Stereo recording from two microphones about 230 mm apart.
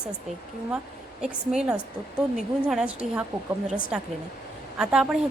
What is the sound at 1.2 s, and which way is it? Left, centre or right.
A woman's voice, centre.